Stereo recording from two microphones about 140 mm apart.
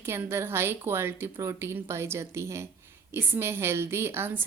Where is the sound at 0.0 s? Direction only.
20° right (ahead or behind).